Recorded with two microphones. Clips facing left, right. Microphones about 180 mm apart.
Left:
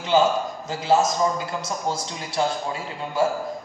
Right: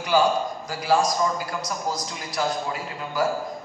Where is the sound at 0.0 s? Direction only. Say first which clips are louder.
Left 1 dB; 25° left (ahead or behind).